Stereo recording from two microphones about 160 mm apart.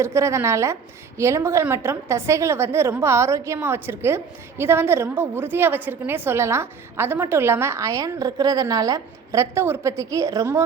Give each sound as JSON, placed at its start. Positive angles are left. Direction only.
{"t": 0.0, "sound": "a woman's voice", "side_deg": -15}